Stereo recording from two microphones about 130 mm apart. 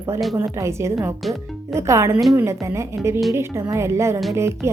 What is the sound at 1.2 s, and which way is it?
Speech, centre (ahead or behind).